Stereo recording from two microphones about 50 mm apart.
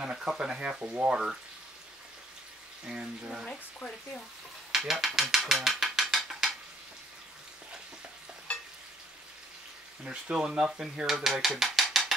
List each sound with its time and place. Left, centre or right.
0.0 s speech: centre
2.9 s speech: centre
4.7 s mechanisms: centre
10.3 s speech: centre
11.1 s mechanisms: centre